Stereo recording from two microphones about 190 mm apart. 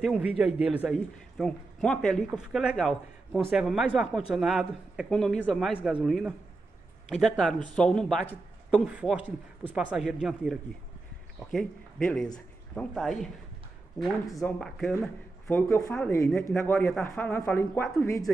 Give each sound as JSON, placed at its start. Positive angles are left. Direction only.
{"t": 0.0, "sound": "a man's voice", "side_deg": 0}
{"t": 14.2, "sound": "speech", "side_deg": 15}
{"t": 14.6, "sound": "a man's voice", "side_deg": 5}